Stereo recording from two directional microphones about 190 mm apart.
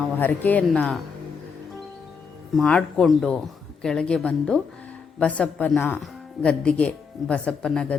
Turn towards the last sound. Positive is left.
turn(degrees=5)  # may be behind; listen again after turning